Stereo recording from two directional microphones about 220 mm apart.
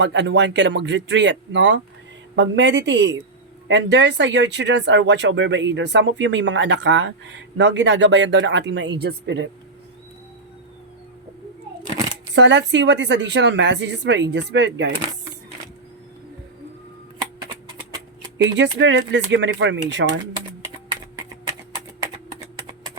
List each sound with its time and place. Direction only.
0.0 s speech: 50° right (ahead or behind)
12.3 s speech: 50° right (ahead or behind)
18.5 s speech: 55° right (ahead or behind)